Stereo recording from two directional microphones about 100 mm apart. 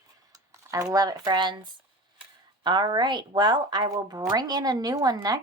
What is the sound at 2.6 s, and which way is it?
Speech, 45° right (ahead or behind).